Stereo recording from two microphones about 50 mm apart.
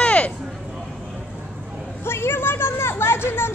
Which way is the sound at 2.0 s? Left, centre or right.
Left.